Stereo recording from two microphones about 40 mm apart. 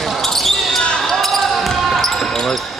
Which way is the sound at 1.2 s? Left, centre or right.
Centre.